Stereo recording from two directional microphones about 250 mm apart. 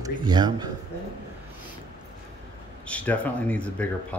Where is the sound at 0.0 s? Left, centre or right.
Centre.